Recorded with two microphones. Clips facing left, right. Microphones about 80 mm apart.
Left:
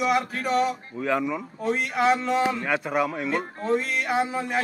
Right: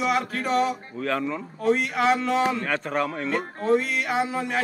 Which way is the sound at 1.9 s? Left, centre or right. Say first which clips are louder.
Even; centre.